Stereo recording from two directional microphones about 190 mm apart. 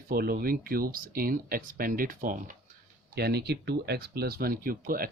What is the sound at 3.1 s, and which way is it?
Speech, 60° right (ahead or behind).